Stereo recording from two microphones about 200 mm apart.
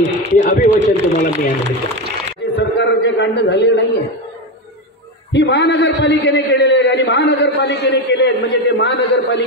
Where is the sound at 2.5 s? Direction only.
60° left (ahead or behind).